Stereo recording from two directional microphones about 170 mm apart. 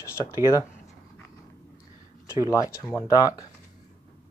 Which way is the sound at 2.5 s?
20° left (ahead or behind).